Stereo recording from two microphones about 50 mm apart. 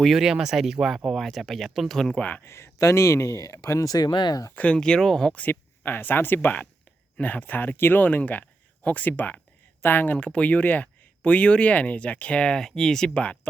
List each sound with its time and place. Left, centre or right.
0.2 s speech: centre
2.1 s speech: left
2.4 s speech: left
4.5 s speech: left
4.8 s speech: centre
5.5 s speech: left
7.2 s speech: left
8.0 s speech: left; by 13.1 s centre
13.1 s speech: left